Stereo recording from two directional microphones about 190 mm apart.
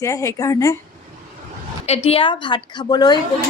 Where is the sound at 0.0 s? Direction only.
15° left (ahead or behind).